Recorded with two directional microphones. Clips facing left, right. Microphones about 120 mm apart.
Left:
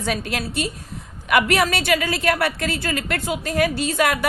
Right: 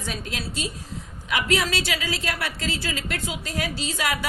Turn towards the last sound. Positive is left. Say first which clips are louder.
# left 7 dB
turn(degrees=60)  # may be behind; listen again after turning